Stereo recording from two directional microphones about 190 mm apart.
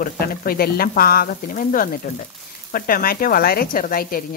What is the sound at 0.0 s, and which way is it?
A woman's voice, 50° left (ahead or behind).